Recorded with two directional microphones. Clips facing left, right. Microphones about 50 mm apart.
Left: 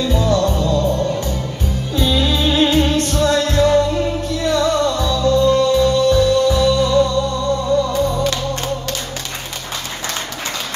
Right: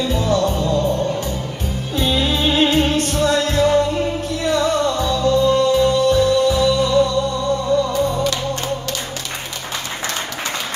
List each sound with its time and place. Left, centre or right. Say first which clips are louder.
0.2 s music: left 1 dB; right